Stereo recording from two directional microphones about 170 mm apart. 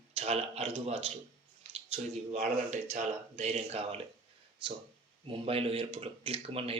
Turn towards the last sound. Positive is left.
turn(degrees=-35)  # may be behind; listen again after turning